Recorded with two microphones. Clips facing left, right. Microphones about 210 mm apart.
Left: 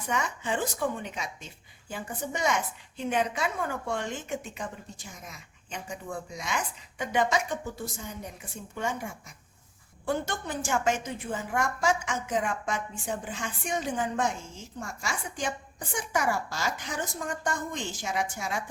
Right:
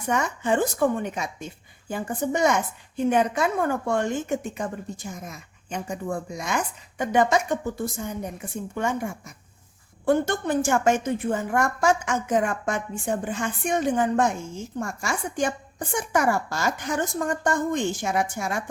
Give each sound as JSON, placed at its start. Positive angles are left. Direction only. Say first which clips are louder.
{"t": 0.1, "sound": "a woman's voice", "louder": "right 7 dB", "side_deg": -45}